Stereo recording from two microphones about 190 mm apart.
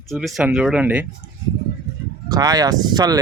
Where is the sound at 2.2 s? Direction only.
20° right (ahead or behind).